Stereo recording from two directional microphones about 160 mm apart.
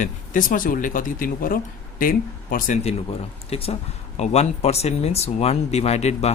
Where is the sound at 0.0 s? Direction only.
55° left (ahead or behind).